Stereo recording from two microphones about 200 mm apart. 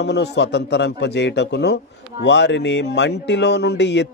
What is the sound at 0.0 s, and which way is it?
Speech, 55° left (ahead or behind).